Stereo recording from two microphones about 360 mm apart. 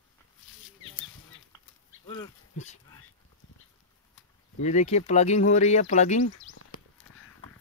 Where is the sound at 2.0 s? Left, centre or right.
Centre.